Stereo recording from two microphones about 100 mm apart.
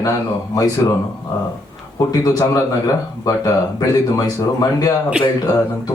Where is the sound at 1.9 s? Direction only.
40° left (ahead or behind).